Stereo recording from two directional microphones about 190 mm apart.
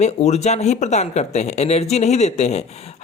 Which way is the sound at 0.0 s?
35° left (ahead or behind).